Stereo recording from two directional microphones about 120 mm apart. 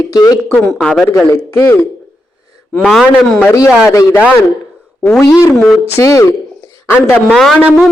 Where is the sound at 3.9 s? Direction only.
25° left (ahead or behind).